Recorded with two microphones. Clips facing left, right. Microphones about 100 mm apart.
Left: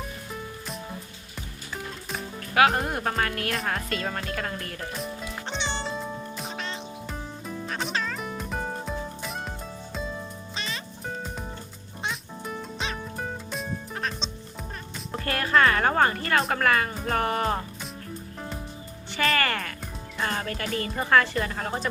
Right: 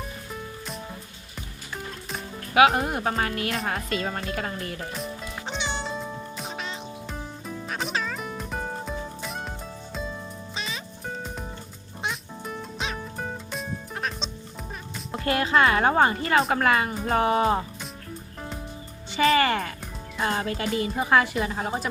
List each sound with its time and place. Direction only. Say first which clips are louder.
0.3 s music: right 1 dB; centre (ahead or behind)
2.6 s music: right 2 dB; centre (ahead or behind)
11.1 s music: even; centre (ahead or behind)
15.2 s a woman's voice: right 1 dB; 20° right (ahead or behind)
19.4 s a woman's voice: right 4 dB; 20° right (ahead or behind)